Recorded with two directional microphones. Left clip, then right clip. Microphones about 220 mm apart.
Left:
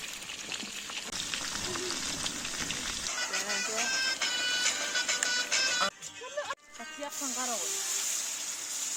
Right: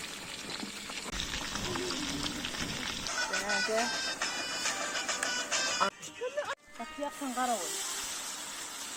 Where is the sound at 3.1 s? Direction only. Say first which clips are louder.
Right 2 dB; 25° left (ahead or behind).